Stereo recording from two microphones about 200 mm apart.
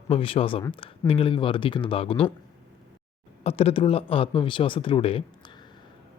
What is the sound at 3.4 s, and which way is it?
Speech, 30° left (ahead or behind).